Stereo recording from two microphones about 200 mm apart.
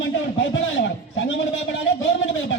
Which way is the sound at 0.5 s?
70° left (ahead or behind).